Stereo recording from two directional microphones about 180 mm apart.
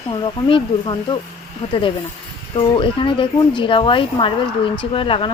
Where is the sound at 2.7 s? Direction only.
30° left (ahead or behind).